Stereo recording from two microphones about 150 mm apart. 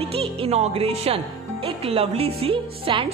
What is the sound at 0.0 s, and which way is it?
Speech, 40° right (ahead or behind).